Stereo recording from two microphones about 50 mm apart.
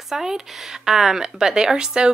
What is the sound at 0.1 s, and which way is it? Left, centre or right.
A woman's voice, centre.